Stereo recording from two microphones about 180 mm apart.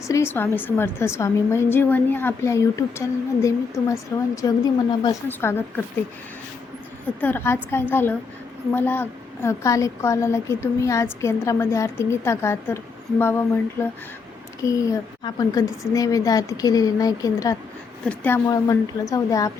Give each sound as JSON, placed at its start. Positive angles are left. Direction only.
{"t": 0.1, "sound": "a woman's voice", "side_deg": 15}
{"t": 5.3, "sound": "a woman's voice", "side_deg": 10}
{"t": 7.2, "sound": "a woman's voice", "side_deg": 10}
{"t": 18.0, "sound": "a woman's voice", "side_deg": 10}
{"t": 18.4, "sound": "a woman's voice", "side_deg": 20}